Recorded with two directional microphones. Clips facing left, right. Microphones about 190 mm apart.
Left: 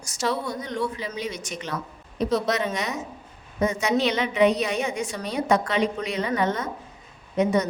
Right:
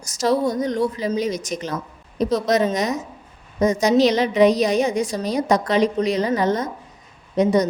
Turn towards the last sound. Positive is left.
turn(degrees=-35)  # may be behind; listen again after turning